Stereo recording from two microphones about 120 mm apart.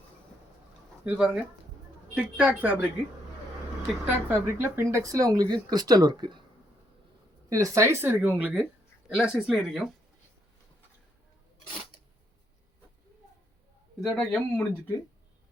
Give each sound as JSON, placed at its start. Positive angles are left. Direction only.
{"t": 1.0, "sound": "a woman's voice", "side_deg": -10}
{"t": 4.0, "sound": "speech", "side_deg": -20}
{"t": 7.5, "sound": "speech", "side_deg": -25}
{"t": 14.0, "sound": "speech", "side_deg": 5}